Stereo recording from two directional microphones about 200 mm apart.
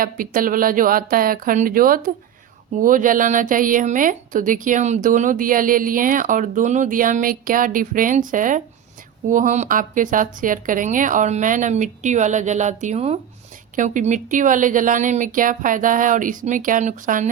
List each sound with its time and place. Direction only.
0.0 s speech: 45° right (ahead or behind)